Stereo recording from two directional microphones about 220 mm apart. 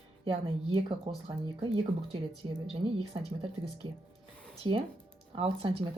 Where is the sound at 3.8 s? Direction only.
25° right (ahead or behind).